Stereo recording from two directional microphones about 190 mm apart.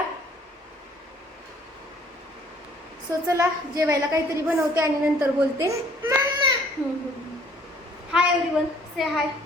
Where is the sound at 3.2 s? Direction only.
15° right (ahead or behind).